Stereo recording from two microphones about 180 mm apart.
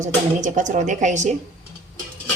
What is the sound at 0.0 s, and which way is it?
A woman's voice, 45° right (ahead or behind).